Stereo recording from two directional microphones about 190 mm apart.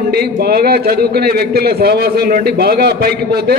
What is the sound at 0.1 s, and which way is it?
A man's voice, 55° right (ahead or behind).